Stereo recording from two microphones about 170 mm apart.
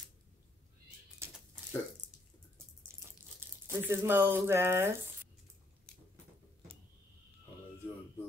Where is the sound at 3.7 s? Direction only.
15° right (ahead or behind).